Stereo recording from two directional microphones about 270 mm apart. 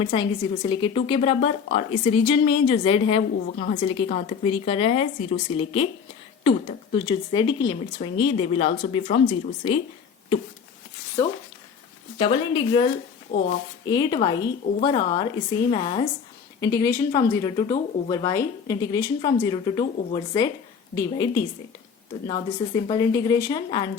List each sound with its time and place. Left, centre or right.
0.0 s a woman's voice: centre
12.2 s speech: centre
13.3 s a woman's voice: left
13.8 s a woman's voice: centre